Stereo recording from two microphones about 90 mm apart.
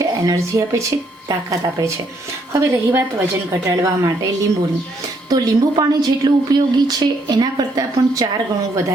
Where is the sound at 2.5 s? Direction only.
35° right (ahead or behind).